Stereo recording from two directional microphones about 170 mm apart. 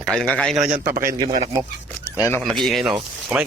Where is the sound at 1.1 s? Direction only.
20° right (ahead or behind).